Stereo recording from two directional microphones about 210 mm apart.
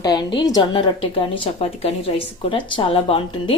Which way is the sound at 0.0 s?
20° left (ahead or behind).